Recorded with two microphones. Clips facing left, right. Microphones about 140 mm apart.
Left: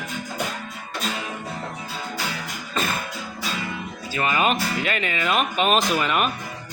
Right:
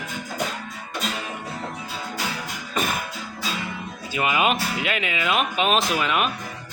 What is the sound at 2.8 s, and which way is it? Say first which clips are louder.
Music: right 1 dB; 15° right (ahead or behind).